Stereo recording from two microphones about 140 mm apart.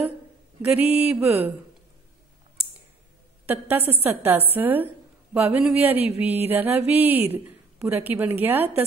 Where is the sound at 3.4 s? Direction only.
15° right (ahead or behind).